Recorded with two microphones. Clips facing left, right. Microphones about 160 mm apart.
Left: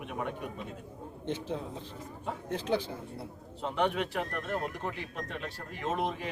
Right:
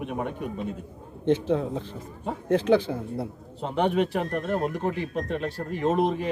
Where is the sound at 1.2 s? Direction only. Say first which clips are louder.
Right 12 dB; 75° right (ahead or behind).